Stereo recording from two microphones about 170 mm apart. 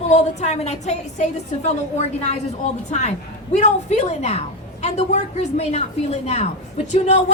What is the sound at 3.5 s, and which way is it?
A woman's voice, 45° left (ahead or behind).